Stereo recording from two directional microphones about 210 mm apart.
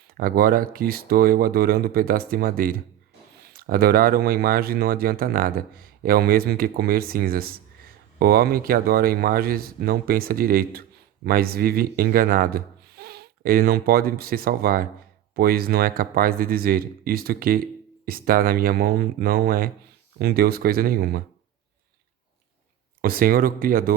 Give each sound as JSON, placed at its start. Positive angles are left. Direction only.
{"t": 0.1, "sound": "speech", "side_deg": -45}
{"t": 23.0, "sound": "speech", "side_deg": -45}